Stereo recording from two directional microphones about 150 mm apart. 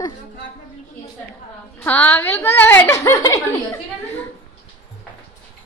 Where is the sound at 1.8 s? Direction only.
10° left (ahead or behind).